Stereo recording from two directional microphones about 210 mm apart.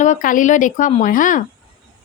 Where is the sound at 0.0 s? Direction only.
40° left (ahead or behind).